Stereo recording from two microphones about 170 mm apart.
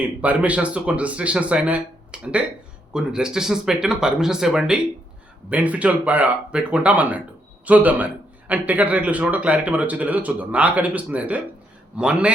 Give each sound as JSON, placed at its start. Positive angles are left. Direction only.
{"t": 0.0, "sound": "a man's voice", "side_deg": -10}